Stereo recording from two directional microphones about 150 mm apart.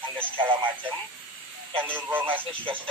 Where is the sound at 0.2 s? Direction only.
10° right (ahead or behind).